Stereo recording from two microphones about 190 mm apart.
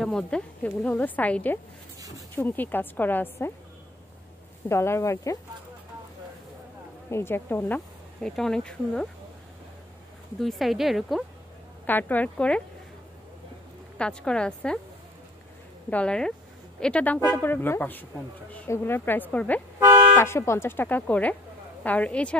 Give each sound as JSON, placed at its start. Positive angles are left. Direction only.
{"t": 0.0, "sound": "speech", "side_deg": 5}
{"t": 2.0, "sound": "a sound", "side_deg": -20}
{"t": 2.3, "sound": "speech", "side_deg": 10}
{"t": 4.6, "sound": "speech", "side_deg": 15}
{"t": 7.1, "sound": "speech", "side_deg": 15}
{"t": 10.4, "sound": "a woman's voice", "side_deg": 0}
{"t": 13.9, "sound": "a woman's voice", "side_deg": 5}
{"t": 15.9, "sound": "a woman's voice", "side_deg": 5}
{"t": 19.8, "sound": "toot", "side_deg": -15}
{"t": 20.2, "sound": "speech", "side_deg": 15}